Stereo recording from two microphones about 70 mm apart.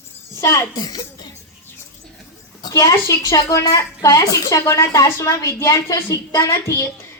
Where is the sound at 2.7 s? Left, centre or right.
Left.